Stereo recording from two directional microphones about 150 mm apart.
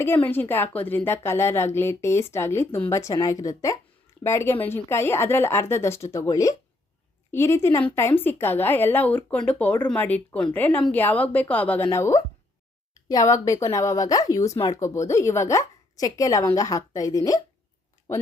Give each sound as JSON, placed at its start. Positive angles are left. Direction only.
{"t": 0.0, "sound": "a woman's voice", "side_deg": 15}